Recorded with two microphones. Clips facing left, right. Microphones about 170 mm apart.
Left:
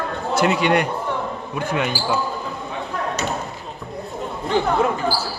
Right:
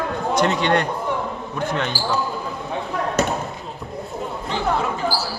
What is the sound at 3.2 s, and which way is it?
Basketball bounce, 50° right (ahead or behind).